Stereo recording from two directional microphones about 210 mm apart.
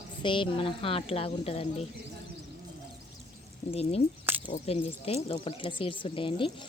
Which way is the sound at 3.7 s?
30° left (ahead or behind).